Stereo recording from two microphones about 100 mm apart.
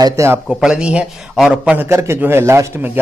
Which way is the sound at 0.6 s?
10° right (ahead or behind).